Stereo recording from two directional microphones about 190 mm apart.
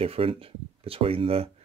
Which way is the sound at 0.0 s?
30° right (ahead or behind).